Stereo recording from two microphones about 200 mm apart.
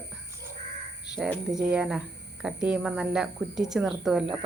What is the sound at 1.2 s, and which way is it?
Speech, centre (ahead or behind).